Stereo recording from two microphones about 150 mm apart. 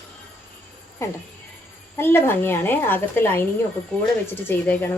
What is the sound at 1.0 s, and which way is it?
A woman's voice, 20° left (ahead or behind).